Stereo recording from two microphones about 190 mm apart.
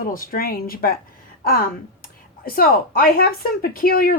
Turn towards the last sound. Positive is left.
turn(degrees=50)  # may be behind; listen again after turning